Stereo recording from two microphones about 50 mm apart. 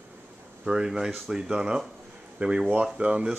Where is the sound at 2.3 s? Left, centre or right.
Right.